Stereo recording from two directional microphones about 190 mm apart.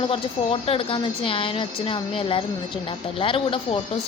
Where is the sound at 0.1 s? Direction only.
30° left (ahead or behind).